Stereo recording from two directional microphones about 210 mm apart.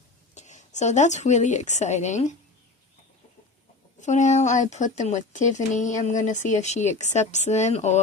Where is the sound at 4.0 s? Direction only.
35° left (ahead or behind).